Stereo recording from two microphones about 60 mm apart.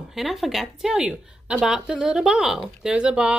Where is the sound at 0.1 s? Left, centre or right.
Centre.